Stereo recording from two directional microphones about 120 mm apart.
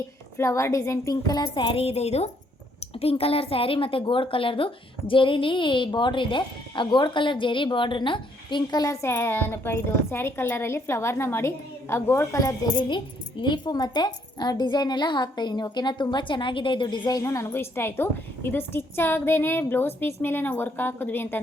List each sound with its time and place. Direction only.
0.3 s a woman's voice: 25° left (ahead or behind)
1.6 s a woman's voice: 55° left (ahead or behind); by 21.4 s 15° left (ahead or behind)